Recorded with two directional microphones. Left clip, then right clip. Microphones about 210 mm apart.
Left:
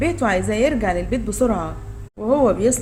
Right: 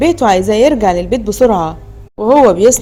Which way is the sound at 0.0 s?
35° right (ahead or behind).